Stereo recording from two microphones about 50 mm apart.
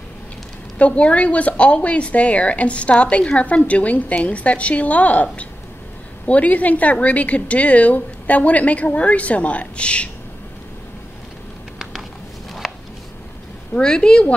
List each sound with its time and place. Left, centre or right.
0.7 s speech: left
12.6 s a sound: centre
13.7 s a woman's voice: centre